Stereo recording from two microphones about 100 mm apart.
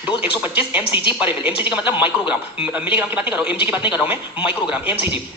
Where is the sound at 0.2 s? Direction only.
15° right (ahead or behind).